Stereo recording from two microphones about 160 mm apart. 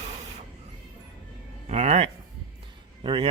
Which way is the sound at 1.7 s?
45° right (ahead or behind).